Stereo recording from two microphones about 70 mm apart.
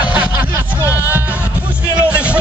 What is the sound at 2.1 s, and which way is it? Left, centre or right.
Music, centre.